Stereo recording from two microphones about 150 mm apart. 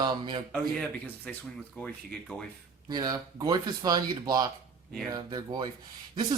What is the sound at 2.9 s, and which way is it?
Speech, 30° right (ahead or behind).